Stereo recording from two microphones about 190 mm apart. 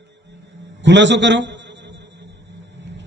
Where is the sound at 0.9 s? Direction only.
70° right (ahead or behind).